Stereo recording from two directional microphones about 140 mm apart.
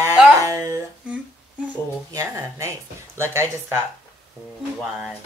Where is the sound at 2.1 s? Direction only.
25° right (ahead or behind).